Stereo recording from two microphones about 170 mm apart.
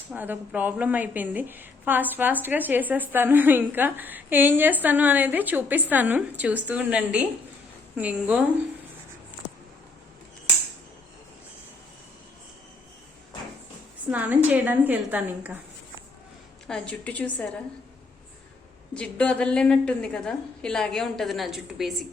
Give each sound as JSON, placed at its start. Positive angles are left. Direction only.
{"t": 0.1, "sound": "a woman's voice", "side_deg": -10}
{"t": 14.1, "sound": "a woman's voice", "side_deg": -10}
{"t": 16.6, "sound": "a woman's voice", "side_deg": 5}
{"t": 18.9, "sound": "a woman's voice", "side_deg": 5}